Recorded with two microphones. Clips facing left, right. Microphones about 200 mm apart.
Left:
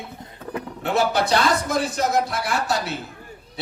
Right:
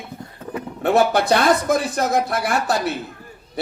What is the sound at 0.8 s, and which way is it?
Speech, 55° right (ahead or behind).